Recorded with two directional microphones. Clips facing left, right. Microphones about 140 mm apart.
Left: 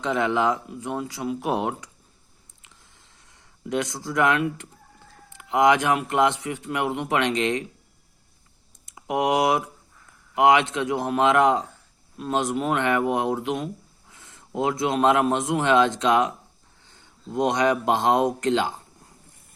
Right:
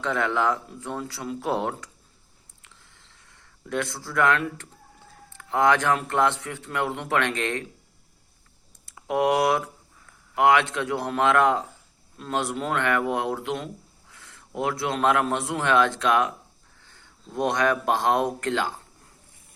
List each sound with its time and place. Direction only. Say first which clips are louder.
0.0 s speech: left 2 dB; 20° left (ahead or behind)
2.6 s a sound: even; 20° left (ahead or behind)
5.3 s speech: left 2 dB; 15° left (ahead or behind)
8.9 s a man's voice: even; 20° left (ahead or behind)